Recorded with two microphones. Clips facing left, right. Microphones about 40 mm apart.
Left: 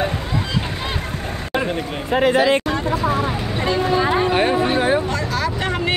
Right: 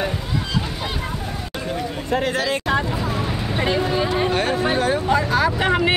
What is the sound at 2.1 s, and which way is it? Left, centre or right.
Speech, left.